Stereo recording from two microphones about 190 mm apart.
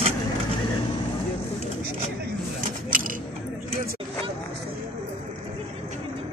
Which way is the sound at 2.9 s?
45° right (ahead or behind).